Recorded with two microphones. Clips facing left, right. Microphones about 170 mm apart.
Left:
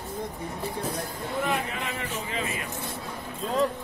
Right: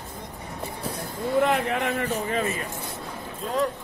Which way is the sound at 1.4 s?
70° right (ahead or behind).